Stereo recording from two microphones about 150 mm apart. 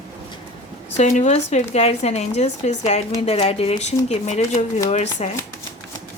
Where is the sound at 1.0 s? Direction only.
50° left (ahead or behind).